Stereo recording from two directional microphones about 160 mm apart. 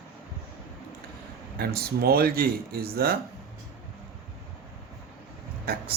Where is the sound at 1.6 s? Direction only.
75° right (ahead or behind).